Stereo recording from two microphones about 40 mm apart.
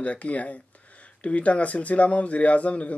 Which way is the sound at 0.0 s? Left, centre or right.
Left.